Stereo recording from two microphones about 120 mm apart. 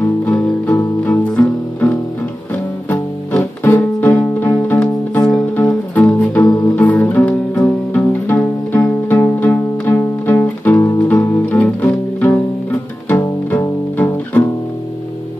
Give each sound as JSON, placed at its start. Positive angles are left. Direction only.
{"t": 0.0, "sound": "music", "side_deg": 15}
{"t": 2.5, "sound": "music", "side_deg": 15}
{"t": 13.9, "sound": "music", "side_deg": 15}